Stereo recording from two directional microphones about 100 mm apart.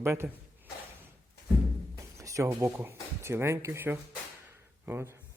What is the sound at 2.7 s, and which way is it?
Speech, 25° right (ahead or behind).